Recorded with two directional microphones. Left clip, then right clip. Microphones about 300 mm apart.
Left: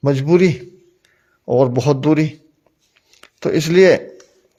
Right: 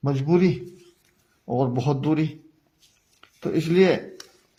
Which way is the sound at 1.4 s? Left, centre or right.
Left.